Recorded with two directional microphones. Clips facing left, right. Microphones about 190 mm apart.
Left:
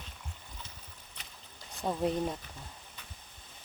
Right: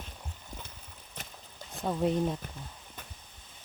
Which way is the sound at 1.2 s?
45° right (ahead or behind).